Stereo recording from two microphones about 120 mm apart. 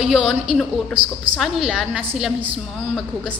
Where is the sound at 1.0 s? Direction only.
50° right (ahead or behind).